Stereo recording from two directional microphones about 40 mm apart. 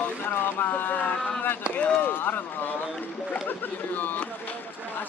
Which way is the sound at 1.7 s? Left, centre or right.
Left.